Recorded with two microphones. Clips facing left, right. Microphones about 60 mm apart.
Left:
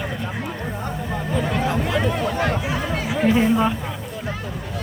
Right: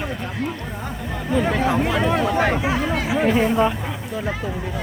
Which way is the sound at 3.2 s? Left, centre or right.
Centre.